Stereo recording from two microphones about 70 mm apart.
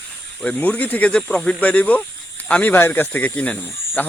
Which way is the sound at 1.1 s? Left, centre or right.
Centre.